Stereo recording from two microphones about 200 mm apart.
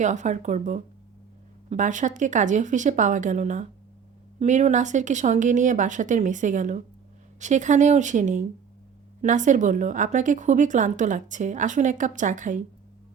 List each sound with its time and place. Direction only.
0.0 s a woman's voice: 35° right (ahead or behind)